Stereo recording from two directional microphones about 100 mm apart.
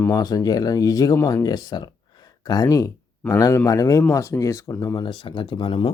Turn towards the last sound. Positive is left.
turn(degrees=55)  # may be behind; listen again after turning